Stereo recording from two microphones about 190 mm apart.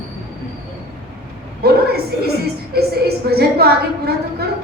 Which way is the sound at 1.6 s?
55° right (ahead or behind).